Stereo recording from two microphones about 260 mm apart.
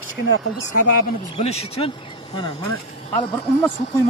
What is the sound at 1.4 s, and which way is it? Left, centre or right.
Speech, left.